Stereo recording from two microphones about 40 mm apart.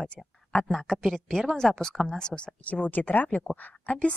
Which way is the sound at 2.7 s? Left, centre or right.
Left.